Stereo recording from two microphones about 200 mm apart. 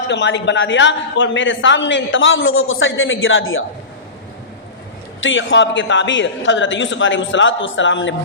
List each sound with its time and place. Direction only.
0.1 s a man's voice: 60° left (ahead or behind); by 3.6 s 80° left
5.2 s a man's voice: 75° left (ahead or behind)